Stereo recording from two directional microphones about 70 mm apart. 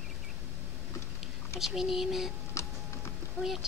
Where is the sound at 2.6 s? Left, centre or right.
Left.